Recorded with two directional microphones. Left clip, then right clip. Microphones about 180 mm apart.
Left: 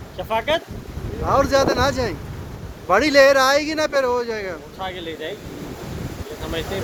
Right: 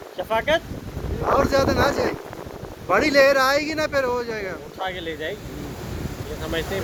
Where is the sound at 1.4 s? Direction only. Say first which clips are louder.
Left 3 dB; 15° left (ahead or behind).